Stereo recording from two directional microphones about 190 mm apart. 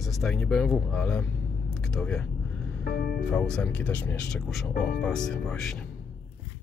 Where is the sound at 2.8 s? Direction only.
50° left (ahead or behind).